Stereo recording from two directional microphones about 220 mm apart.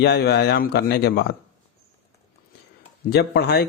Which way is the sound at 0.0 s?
50° left (ahead or behind).